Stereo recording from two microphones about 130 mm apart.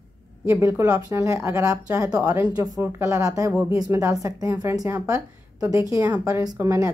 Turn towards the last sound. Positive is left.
turn(degrees=-20)  # may be behind; listen again after turning